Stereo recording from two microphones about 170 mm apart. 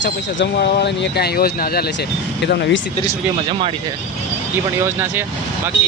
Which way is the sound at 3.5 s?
30° right (ahead or behind).